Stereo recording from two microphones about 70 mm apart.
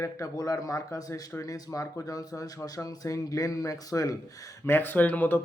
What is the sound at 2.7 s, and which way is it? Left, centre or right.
Speech, left.